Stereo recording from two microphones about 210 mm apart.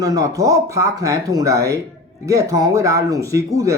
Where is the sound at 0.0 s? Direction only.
15° right (ahead or behind).